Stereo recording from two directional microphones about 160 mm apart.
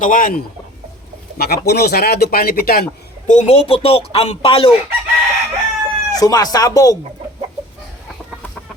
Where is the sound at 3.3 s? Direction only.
45° left (ahead or behind).